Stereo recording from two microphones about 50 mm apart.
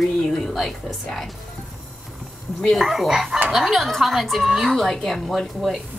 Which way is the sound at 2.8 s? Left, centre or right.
Centre.